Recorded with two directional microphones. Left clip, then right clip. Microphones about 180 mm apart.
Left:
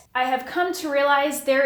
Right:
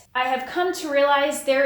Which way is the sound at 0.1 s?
40° left (ahead or behind).